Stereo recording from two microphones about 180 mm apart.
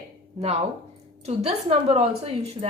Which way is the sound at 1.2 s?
35° right (ahead or behind).